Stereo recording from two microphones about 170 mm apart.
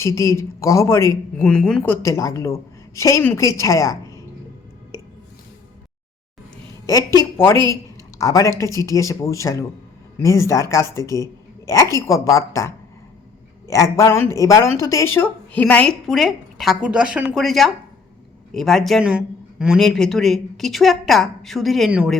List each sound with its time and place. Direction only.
0.0 s speech: 15° left (ahead or behind)
7.2 s a woman's voice: 15° left (ahead or behind); by 22.2 s 5° right (ahead or behind)